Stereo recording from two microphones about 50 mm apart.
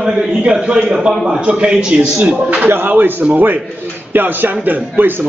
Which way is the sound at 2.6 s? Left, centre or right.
Right.